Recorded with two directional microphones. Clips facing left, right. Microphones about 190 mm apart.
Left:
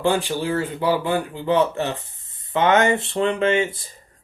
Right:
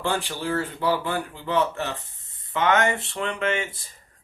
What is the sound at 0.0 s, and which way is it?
Speech, 15° left (ahead or behind).